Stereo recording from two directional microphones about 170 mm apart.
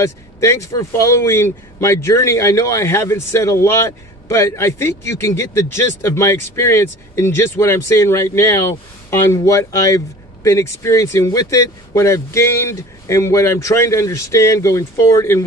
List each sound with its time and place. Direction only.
0.0 s speech: 15° left (ahead or behind)